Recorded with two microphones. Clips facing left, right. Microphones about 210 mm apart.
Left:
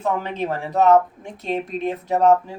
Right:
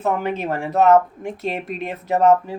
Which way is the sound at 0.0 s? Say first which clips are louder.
Right 2 dB; 5° right (ahead or behind).